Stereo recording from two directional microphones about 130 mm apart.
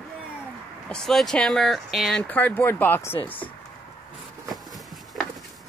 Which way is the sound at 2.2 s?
15° left (ahead or behind).